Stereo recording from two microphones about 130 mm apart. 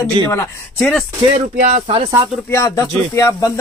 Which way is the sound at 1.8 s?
45° right (ahead or behind).